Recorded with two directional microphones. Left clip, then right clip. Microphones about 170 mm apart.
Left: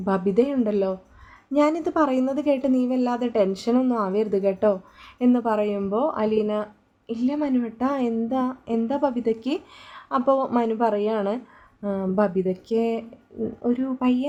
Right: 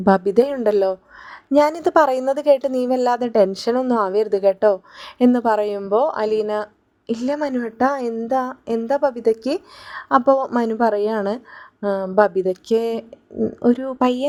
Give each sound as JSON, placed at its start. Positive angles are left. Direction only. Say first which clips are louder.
{"t": 0.0, "sound": "a woman's voice", "louder": "right 6 dB", "side_deg": -40}